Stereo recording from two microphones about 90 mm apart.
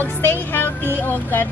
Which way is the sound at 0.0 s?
25° left (ahead or behind).